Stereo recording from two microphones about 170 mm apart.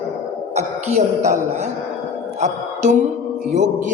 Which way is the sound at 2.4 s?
45° right (ahead or behind).